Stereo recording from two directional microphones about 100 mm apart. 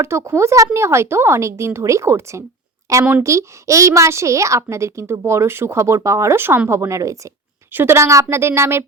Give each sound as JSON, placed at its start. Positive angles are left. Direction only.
{"t": 0.0, "sound": "a woman's voice", "side_deg": -30}